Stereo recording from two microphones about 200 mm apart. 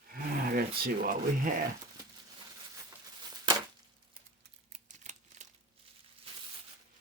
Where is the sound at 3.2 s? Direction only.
20° right (ahead or behind).